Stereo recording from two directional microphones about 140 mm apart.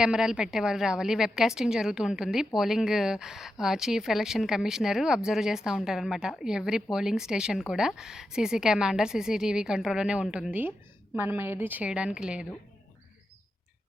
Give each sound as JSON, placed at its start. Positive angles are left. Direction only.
{"t": 0.0, "sound": "a woman's voice", "side_deg": -5}